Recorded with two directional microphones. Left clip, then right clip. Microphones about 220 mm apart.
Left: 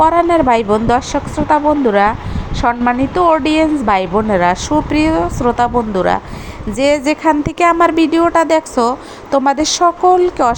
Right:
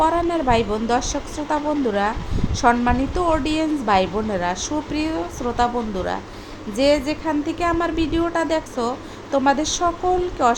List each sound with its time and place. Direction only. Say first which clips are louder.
0.0 s a woman's voice: left 9 dB; 25° left (ahead or behind)